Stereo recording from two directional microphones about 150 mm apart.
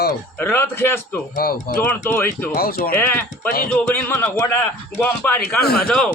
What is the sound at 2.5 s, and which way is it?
Speech, 80° left.